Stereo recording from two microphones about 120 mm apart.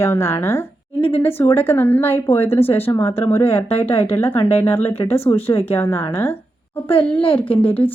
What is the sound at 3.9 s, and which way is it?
Speech, 50° left (ahead or behind).